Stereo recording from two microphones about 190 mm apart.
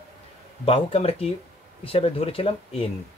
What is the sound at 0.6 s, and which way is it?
Speech, 30° left (ahead or behind).